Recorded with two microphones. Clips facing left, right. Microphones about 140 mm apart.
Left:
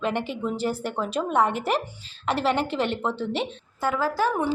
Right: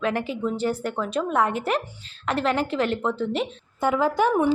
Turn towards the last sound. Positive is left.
turn(degrees=-20)  # may be behind; listen again after turning